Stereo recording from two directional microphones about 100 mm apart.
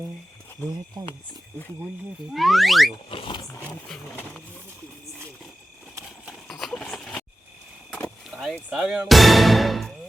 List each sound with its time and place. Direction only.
2.3 s speech: centre (ahead or behind)
3.1 s speech: 60° left (ahead or behind)
3.8 s speech: 5° left (ahead or behind)
6.5 s a sound: centre (ahead or behind)
8.3 s a sound: 15° right (ahead or behind)
8.7 s speech: 5° right (ahead or behind)